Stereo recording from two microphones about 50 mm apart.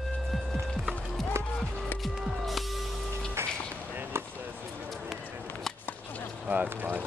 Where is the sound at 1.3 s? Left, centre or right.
Right.